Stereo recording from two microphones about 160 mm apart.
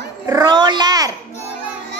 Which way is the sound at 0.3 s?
25° right (ahead or behind).